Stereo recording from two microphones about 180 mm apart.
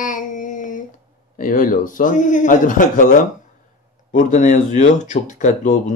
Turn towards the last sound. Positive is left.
turn(degrees=45)  # may be behind; listen again after turning